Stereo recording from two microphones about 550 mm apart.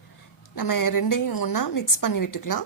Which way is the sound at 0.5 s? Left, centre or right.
Left.